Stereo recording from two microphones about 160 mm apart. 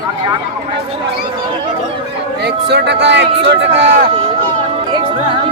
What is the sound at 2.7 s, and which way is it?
Speech, 90° right.